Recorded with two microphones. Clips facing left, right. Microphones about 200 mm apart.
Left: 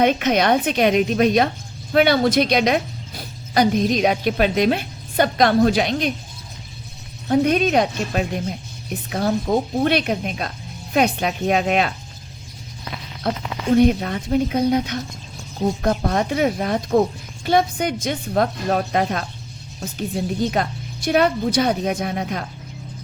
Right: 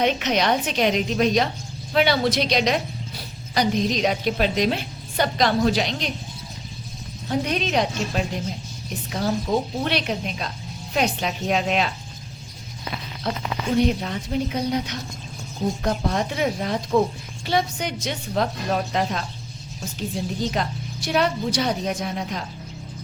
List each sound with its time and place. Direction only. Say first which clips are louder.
0.0 s a woman's voice: left 4 dB; 55° left (ahead or behind)
7.3 s a woman's voice: left 7 dB; 55° left (ahead or behind)
13.2 s a woman's voice: left 5 dB; 55° left (ahead or behind)